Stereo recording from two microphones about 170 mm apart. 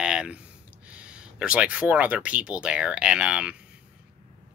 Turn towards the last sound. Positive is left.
turn(degrees=-5)  # may be behind; listen again after turning